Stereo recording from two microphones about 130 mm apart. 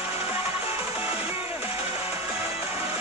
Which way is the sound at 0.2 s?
20° right (ahead or behind).